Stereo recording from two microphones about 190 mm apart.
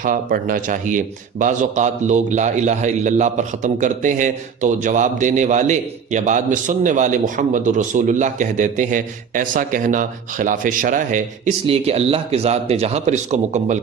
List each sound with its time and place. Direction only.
0.0 s a man's voice: 45° right (ahead or behind)
11.6 s a man's voice: 30° right (ahead or behind)